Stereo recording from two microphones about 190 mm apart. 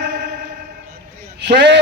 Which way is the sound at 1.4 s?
65° right (ahead or behind).